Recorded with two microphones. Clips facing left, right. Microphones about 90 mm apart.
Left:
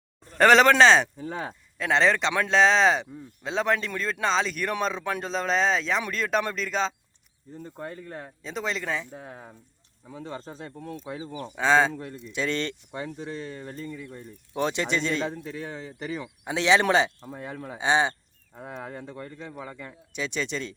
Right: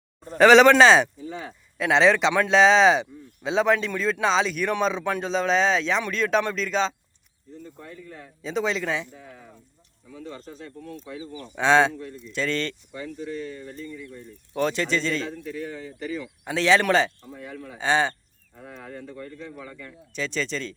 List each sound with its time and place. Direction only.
0.3 s speech: centre (ahead or behind)
1.2 s speech: 50° left (ahead or behind)
1.8 s speech: centre (ahead or behind)
7.5 s speech: 45° left (ahead or behind)
8.4 s speech: centre (ahead or behind)
9.1 s speech: 40° left (ahead or behind)
10.1 s speech: 30° left (ahead or behind)
11.5 s speech: centre (ahead or behind)
11.9 s speech: 50° left (ahead or behind)
12.3 s speech: 20° left (ahead or behind)
12.9 s speech: 30° left (ahead or behind)
14.5 s speech: 20° left (ahead or behind)
17.2 s speech: 35° left (ahead or behind)
17.7 s speech: 20° left (ahead or behind)